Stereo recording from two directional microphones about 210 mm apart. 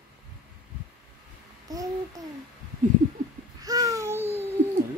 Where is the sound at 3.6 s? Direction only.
15° right (ahead or behind).